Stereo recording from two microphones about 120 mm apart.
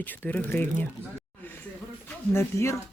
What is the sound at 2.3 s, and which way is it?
Speech, 25° left (ahead or behind).